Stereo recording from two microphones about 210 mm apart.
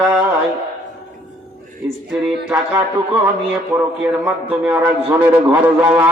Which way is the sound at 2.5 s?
10° right (ahead or behind).